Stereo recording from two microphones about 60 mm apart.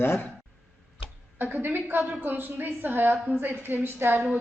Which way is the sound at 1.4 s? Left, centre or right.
Right.